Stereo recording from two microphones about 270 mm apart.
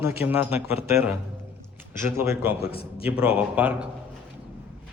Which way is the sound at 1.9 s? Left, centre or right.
Centre.